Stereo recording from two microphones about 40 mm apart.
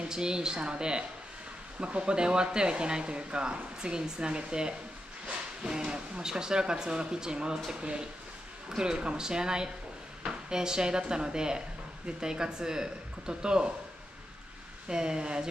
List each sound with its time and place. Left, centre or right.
0.0 s speech: centre
7.8 s speech: right
14.9 s speech: right